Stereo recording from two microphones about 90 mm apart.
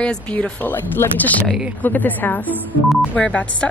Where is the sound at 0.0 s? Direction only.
15° left (ahead or behind).